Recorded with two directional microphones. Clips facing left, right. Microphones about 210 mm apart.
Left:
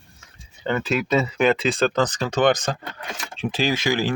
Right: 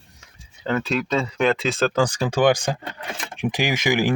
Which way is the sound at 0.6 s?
Centre (ahead or behind).